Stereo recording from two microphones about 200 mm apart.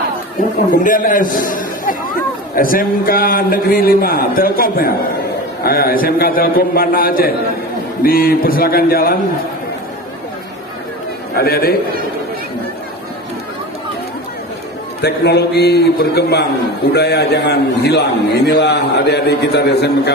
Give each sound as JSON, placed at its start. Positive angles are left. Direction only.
{"t": 0.7, "sound": "a man's voice", "side_deg": 40}
{"t": 11.3, "sound": "a man's voice", "side_deg": 50}
{"t": 15.0, "sound": "a man's voice", "side_deg": 55}